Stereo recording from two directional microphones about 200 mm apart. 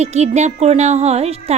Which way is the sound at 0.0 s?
35° right (ahead or behind).